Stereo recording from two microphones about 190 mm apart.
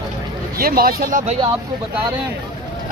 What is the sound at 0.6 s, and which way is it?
Speech, 50° right (ahead or behind).